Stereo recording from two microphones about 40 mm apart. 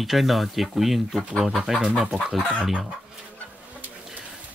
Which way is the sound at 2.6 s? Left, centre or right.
Centre.